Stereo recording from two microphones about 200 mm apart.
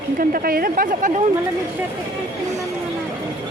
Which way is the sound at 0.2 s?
45° right (ahead or behind).